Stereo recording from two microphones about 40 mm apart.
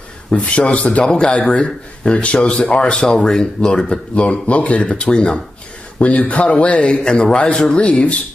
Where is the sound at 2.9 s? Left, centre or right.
Centre.